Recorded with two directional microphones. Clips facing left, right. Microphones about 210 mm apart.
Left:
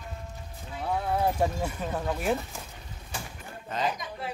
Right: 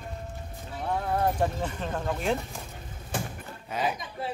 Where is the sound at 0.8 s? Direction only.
5° left (ahead or behind).